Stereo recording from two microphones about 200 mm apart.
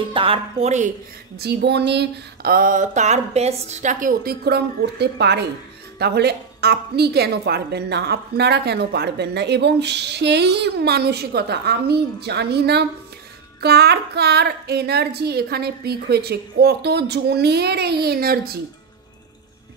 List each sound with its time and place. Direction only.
0.1 s speech: 25° right (ahead or behind)
1.3 s a woman's voice: 55° right (ahead or behind)